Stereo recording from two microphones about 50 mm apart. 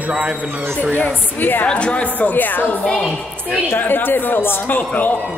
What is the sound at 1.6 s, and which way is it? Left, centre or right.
Speech, left.